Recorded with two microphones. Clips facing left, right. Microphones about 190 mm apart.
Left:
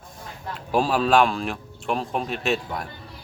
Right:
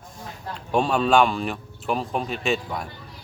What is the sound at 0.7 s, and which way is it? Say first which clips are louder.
A man's voice: even; 5° left (ahead or behind).